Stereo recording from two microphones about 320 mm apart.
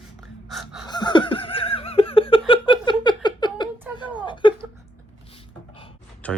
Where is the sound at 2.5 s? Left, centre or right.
Centre.